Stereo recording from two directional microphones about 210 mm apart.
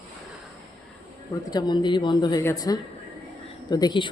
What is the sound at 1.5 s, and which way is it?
A woman's voice, 20° left (ahead or behind).